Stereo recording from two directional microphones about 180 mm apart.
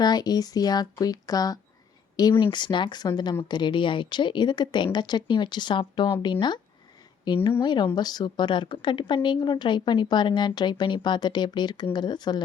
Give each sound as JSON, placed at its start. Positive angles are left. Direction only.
{"t": 0.0, "sound": "speech", "side_deg": 20}